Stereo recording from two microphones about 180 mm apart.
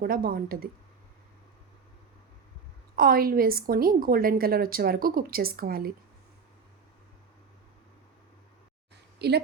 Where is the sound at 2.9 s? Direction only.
55° right (ahead or behind).